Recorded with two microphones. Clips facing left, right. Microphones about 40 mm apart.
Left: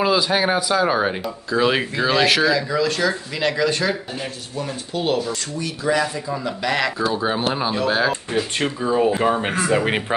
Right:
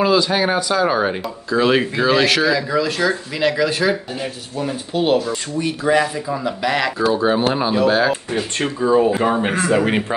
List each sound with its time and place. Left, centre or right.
0.0 s speech: centre
5.3 s speech: right
6.1 s speech: centre
9.8 s speech: centre